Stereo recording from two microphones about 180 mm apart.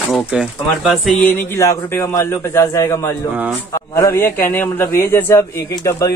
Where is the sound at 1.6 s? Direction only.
15° left (ahead or behind).